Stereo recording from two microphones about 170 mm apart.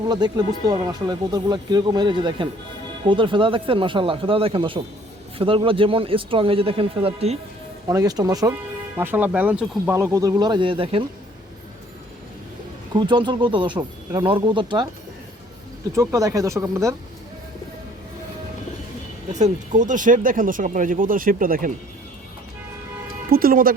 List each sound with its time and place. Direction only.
0.1 s speech: 25° right (ahead or behind)
7.9 s speech: 20° right (ahead or behind)
9.0 s speech: 10° right (ahead or behind); by 11.0 s 30° right (ahead or behind)
12.9 s speech: 25° right (ahead or behind)
16.0 s speech: 20° right (ahead or behind)
19.3 s speech: 45° right (ahead or behind)
23.3 s speech: 60° right (ahead or behind)